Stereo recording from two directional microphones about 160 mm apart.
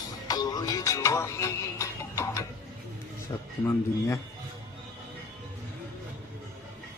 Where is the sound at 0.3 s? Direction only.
25° left (ahead or behind).